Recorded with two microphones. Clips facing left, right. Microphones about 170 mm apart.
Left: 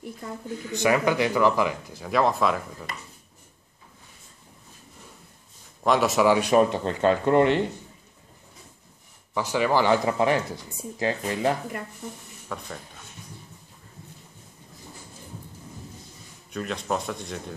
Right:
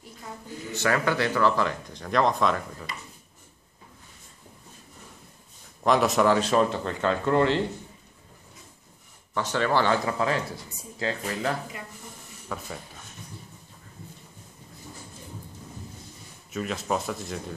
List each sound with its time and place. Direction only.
0.7 s speech: 15° left (ahead or behind)
5.9 s speech: centre (ahead or behind); by 7.6 s 20° left (ahead or behind)
9.3 s speech: 10° left (ahead or behind)
12.4 s speech: 5° right (ahead or behind)
16.5 s speech: 5° right (ahead or behind)